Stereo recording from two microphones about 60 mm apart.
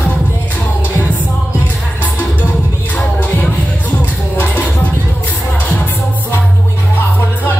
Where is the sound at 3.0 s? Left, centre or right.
Left.